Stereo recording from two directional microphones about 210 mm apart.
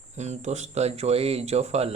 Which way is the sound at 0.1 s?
35° right (ahead or behind).